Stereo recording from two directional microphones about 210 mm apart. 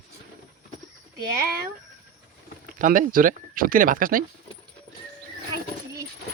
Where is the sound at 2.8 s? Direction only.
40° right (ahead or behind).